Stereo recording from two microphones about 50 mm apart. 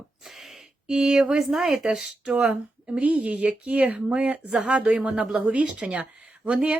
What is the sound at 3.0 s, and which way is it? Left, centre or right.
Speech, right.